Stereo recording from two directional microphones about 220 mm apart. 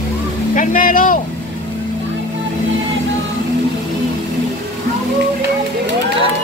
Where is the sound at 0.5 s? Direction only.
35° left (ahead or behind).